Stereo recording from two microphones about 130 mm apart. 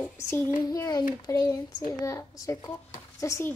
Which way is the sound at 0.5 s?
30° left (ahead or behind).